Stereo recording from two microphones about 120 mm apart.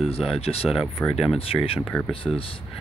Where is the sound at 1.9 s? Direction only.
15° left (ahead or behind).